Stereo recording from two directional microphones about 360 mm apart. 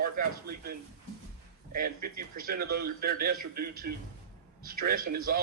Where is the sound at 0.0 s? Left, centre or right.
Right.